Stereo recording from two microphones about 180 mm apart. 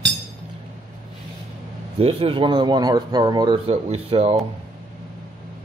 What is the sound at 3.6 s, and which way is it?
Speech, 35° right (ahead or behind).